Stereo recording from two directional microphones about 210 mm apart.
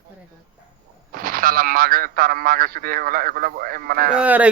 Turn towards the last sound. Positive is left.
turn(degrees=-5)  # may be behind; listen again after turning